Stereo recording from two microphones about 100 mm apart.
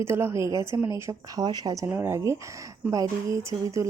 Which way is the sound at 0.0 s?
25° right (ahead or behind).